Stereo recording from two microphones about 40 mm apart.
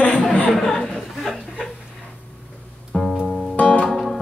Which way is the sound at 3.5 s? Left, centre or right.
Left.